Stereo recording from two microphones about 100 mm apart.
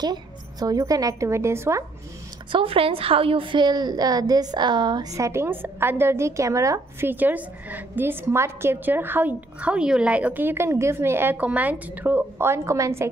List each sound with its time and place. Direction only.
0.0 s a woman's voice: 40° right (ahead or behind)
2.5 s a woman's voice: 65° right (ahead or behind); by 5.0 s 50° right (ahead or behind)
5.1 s a woman's voice: 30° right (ahead or behind)
7.1 s a woman's voice: 20° right (ahead or behind)